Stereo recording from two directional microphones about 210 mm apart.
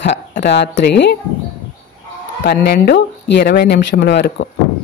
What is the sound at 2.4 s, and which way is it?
Speech, 50° left (ahead or behind).